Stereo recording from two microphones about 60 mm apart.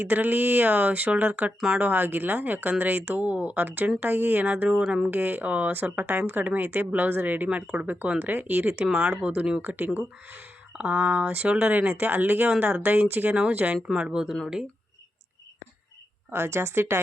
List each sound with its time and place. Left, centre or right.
0.0 s speech: right
8.8 s speech: right
13.3 s speech: right
16.3 s a woman's voice: right